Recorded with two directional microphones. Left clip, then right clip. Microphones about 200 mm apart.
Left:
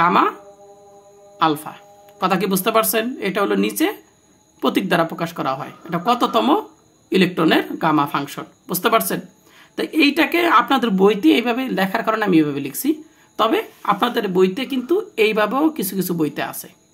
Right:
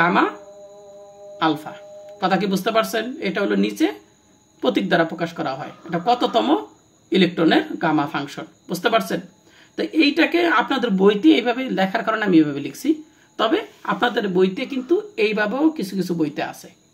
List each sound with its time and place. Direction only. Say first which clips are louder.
0.0 s speech: left 2 dB; 40° left (ahead or behind)
1.4 s speech: left 3 dB; 30° left (ahead or behind)